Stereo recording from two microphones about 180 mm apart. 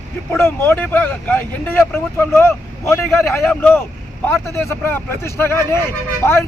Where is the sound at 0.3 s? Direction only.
15° left (ahead or behind).